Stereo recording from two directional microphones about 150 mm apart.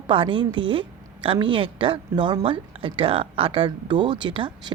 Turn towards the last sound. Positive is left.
turn(degrees=-35)  # may be behind; listen again after turning